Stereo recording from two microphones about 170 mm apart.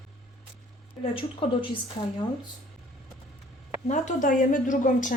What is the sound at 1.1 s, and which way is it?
Speech, 30° left (ahead or behind).